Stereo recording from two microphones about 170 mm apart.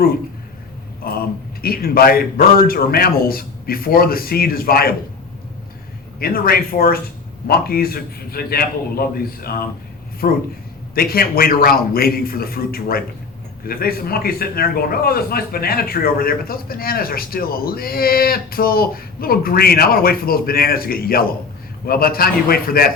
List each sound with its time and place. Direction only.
1.0 s a man's voice: 60° left (ahead or behind)
6.1 s a man's voice: 60° left (ahead or behind)